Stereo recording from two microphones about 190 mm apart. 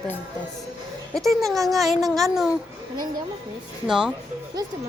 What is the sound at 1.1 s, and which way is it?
Speech, centre (ahead or behind).